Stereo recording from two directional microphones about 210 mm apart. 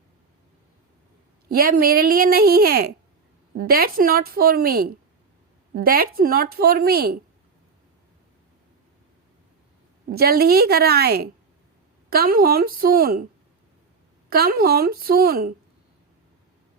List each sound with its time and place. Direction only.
1.5 s a woman's voice: 45° right (ahead or behind)
10.1 s a woman's voice: 45° right (ahead or behind)
14.3 s a woman's voice: 45° right (ahead or behind)